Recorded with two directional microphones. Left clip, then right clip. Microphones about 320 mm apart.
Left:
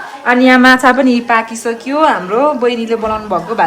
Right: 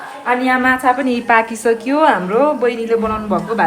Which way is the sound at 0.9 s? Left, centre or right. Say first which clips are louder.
Left 6 dB; centre.